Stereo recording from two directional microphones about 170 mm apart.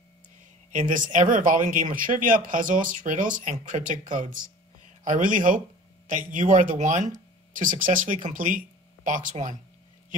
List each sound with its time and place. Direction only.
0.7 s speech: 50° right (ahead or behind)